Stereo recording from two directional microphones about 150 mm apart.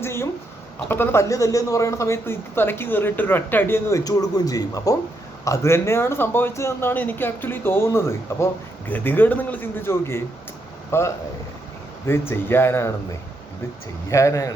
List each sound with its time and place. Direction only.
0.0 s a sound: 15° left (ahead or behind)
0.9 s speech: 15° left (ahead or behind)
14.1 s speech: 20° left (ahead or behind)